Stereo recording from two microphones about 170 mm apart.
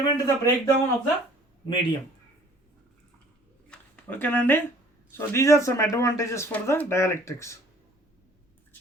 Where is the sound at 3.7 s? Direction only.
10° left (ahead or behind).